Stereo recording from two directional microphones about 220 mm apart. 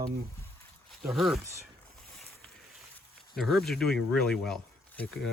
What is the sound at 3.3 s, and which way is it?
Speech, centre (ahead or behind).